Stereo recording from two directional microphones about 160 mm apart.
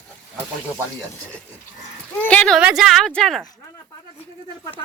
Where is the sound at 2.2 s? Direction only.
10° left (ahead or behind).